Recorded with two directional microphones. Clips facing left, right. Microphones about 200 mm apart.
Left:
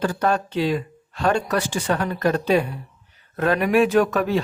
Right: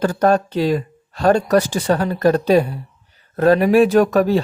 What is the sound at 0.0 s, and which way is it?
Speech, 40° right (ahead or behind).